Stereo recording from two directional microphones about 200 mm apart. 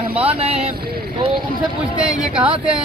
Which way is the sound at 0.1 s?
30° right (ahead or behind).